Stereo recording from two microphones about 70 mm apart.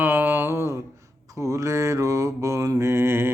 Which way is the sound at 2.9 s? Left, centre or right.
Right.